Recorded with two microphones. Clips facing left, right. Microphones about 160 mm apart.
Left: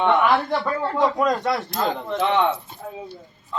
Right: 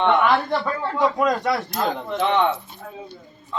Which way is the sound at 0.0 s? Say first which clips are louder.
Even; centre (ahead or behind).